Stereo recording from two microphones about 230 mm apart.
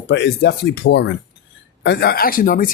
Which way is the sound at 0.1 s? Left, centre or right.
Left.